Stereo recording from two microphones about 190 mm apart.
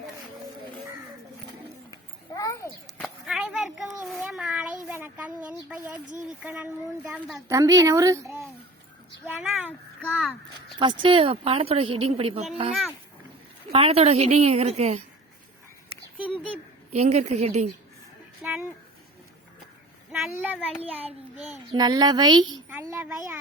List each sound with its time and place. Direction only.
1.9 s a sound: 20° left (ahead or behind)
3.0 s a sound: centre (ahead or behind)
7.4 s speech: 15° right (ahead or behind)
9.2 s a sound: 10° right (ahead or behind)
10.0 s speech: 5° left (ahead or behind)
10.8 s a woman's voice: 25° right (ahead or behind)
13.7 s a woman's voice: 30° right (ahead or behind)
16.9 s a woman's voice: 35° right (ahead or behind)
18.4 s speech: 5° right (ahead or behind)
20.1 s a child's voice: centre (ahead or behind)
21.7 s a woman's voice: 20° right (ahead or behind)